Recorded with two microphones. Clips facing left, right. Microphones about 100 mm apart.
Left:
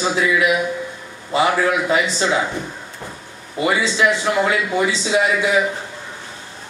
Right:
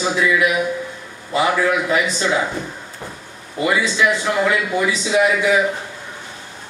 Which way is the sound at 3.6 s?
25° left (ahead or behind).